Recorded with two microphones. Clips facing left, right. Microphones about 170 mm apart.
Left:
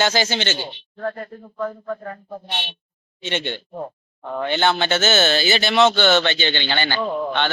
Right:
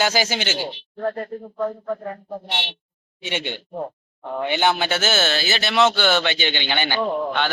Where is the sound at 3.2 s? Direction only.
10° right (ahead or behind).